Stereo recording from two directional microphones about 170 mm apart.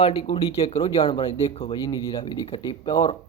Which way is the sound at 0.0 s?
30° left (ahead or behind).